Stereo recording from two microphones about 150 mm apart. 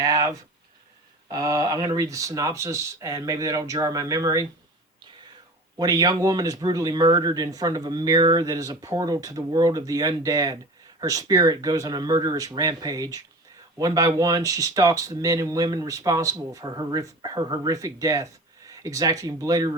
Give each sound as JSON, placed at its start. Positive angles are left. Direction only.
{"t": 0.0, "sound": "a sound", "side_deg": -20}
{"t": 1.3, "sound": "speech", "side_deg": -25}
{"t": 5.7, "sound": "speech", "side_deg": -25}